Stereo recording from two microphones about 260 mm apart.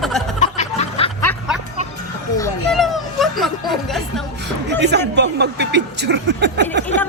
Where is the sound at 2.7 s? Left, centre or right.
Centre.